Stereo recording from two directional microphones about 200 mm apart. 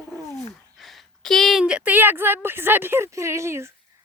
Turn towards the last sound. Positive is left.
turn(degrees=-15)  # may be behind; listen again after turning